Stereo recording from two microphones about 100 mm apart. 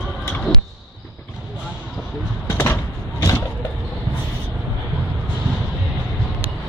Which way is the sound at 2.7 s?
35° left (ahead or behind).